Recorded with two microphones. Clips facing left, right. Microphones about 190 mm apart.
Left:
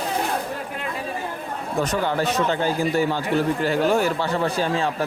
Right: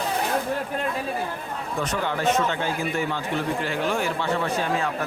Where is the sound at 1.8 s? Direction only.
35° left (ahead or behind).